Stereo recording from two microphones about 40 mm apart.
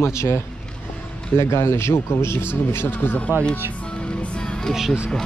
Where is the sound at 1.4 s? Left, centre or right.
Left.